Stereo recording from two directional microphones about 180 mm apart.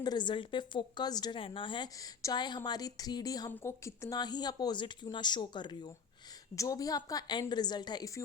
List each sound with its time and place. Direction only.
0.0 s a woman's voice: 25° left (ahead or behind)